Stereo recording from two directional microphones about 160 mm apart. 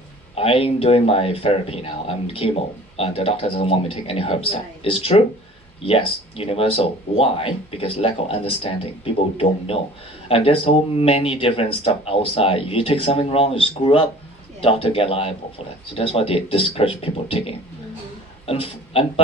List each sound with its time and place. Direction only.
0.4 s speech: 35° left (ahead or behind)